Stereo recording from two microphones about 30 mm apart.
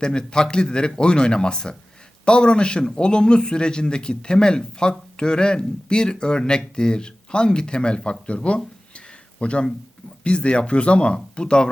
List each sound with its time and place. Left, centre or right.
0.0 s a man's voice: left